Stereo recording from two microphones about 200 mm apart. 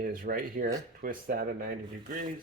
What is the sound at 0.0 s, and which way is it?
Speech, 45° right (ahead or behind).